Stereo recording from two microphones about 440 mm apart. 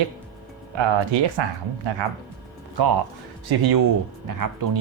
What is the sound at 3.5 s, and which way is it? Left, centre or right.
Speech, right.